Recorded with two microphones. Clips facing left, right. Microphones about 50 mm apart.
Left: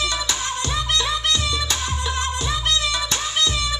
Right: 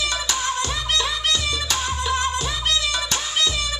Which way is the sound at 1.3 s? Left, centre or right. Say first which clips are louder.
Left 1 dB; left.